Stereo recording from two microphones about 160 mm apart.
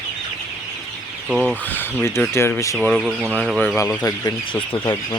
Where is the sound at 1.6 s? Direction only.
10° left (ahead or behind).